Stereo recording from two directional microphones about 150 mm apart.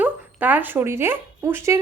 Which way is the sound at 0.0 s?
10° right (ahead or behind).